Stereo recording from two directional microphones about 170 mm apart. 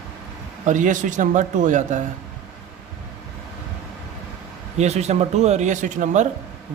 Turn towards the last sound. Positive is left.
turn(degrees=-45)  # may be behind; listen again after turning